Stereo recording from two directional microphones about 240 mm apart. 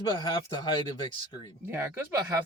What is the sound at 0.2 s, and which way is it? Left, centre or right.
Speech, centre.